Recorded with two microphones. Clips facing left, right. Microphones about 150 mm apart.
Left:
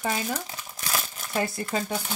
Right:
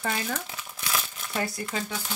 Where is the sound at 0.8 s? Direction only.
40° left (ahead or behind).